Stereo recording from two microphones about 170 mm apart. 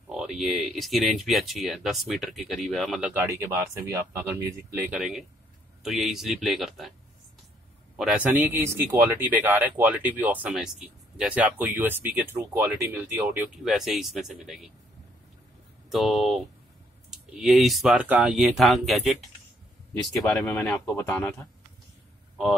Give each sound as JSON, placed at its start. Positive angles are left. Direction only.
{"t": 0.1, "sound": "speech", "side_deg": 0}
{"t": 5.8, "sound": "speech", "side_deg": 0}
{"t": 7.9, "sound": "speech", "side_deg": -5}
{"t": 13.7, "sound": "speech", "side_deg": 0}
{"t": 15.9, "sound": "speech", "side_deg": 0}
{"t": 20.2, "sound": "speech", "side_deg": 15}
{"t": 20.6, "sound": "speech", "side_deg": 5}